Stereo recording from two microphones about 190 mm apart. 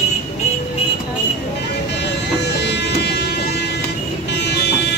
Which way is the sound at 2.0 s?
65° left (ahead or behind).